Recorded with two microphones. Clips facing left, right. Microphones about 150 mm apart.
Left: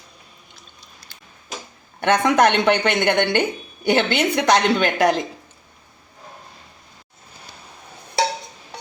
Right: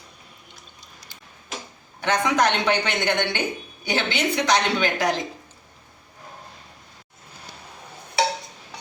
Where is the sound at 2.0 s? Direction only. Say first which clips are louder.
Left 5 dB; 55° left (ahead or behind).